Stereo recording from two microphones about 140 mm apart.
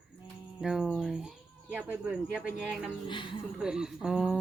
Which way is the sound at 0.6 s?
5° right (ahead or behind).